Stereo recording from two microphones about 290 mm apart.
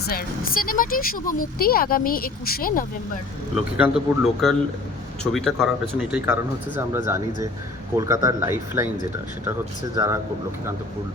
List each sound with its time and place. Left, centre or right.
0.0 s speech: left
3.5 s speech: centre